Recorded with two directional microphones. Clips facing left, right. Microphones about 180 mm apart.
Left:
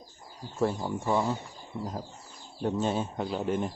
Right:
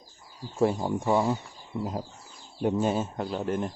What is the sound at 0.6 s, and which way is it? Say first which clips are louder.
Speech: right 4 dB; 15° right (ahead or behind).